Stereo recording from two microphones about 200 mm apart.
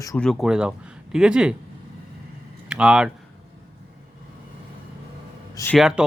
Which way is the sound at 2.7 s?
5° right (ahead or behind).